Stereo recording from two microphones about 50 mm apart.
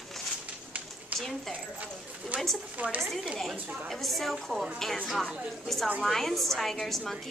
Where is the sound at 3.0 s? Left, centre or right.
Centre.